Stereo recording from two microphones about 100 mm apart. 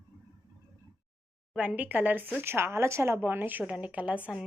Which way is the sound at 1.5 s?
15° right (ahead or behind).